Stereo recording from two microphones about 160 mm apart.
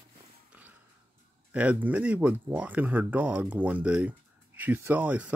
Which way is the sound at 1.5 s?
10° right (ahead or behind).